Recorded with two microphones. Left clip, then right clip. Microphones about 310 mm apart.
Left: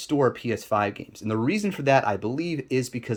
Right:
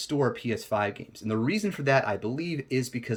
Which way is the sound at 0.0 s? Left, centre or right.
Centre.